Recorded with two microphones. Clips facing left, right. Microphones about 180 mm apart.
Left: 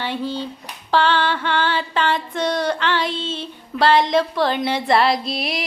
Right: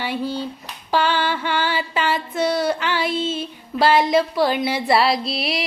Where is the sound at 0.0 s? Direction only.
10° right (ahead or behind).